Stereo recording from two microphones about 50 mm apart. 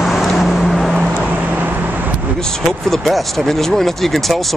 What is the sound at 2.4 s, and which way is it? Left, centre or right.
Speech, centre.